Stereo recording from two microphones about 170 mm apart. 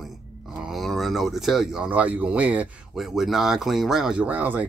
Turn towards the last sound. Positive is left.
turn(degrees=-10)  # may be behind; listen again after turning